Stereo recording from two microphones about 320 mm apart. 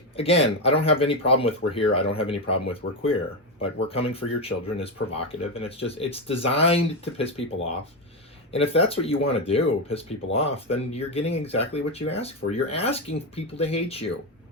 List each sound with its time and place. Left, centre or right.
0.2 s speech: centre